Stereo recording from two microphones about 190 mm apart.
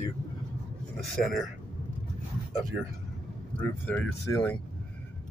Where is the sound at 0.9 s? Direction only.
Centre (ahead or behind).